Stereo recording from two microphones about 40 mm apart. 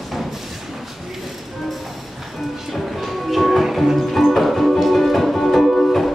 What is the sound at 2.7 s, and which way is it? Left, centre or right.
Music, centre.